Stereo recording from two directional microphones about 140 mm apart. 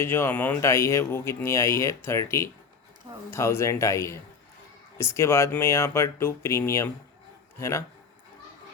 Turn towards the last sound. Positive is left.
turn(degrees=20)  # may be behind; listen again after turning